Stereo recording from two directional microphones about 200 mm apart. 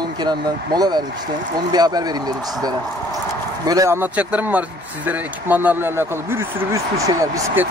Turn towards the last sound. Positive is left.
turn(degrees=-15)  # may be behind; listen again after turning